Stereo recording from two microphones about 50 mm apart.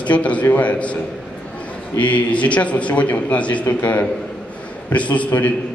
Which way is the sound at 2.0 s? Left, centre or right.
Left.